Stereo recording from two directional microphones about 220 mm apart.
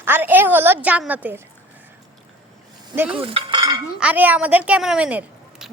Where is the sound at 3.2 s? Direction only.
20° right (ahead or behind).